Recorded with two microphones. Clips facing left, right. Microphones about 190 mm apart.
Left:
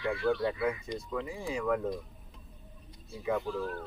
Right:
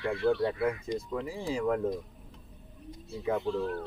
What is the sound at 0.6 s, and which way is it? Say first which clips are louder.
Speech: right 2 dB; 45° right (ahead or behind).